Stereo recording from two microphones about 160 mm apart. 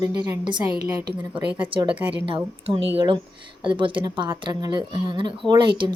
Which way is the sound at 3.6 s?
30° right (ahead or behind).